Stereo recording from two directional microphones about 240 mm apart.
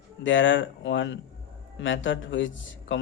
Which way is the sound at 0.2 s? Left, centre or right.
Left.